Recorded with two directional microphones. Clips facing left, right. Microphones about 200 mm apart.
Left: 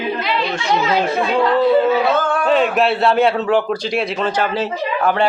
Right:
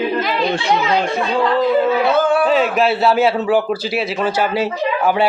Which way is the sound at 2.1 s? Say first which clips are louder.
Right 2 dB; 10° right (ahead or behind).